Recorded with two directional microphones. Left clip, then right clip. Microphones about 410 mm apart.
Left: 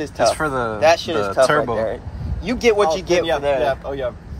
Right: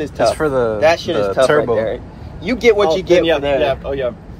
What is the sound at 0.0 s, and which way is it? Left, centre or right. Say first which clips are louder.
Speech: right 3 dB; centre.